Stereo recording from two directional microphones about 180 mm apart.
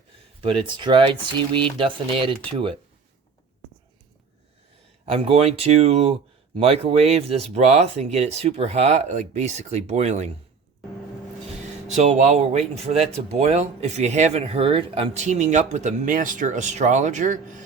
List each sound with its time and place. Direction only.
0.4 s speech: 25° right (ahead or behind)
5.0 s speech: 35° right (ahead or behind)
11.9 s speech: 40° right (ahead or behind)